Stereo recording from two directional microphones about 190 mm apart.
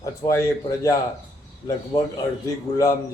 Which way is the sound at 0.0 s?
15° left (ahead or behind).